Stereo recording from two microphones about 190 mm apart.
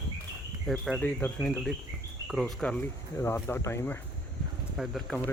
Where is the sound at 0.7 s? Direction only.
Centre (ahead or behind).